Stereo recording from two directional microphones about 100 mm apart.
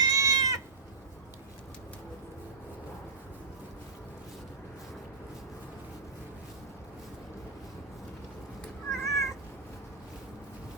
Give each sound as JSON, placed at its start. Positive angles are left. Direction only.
{"t": 0.0, "sound": "cat", "side_deg": -35}
{"t": 8.9, "sound": "cat", "side_deg": 0}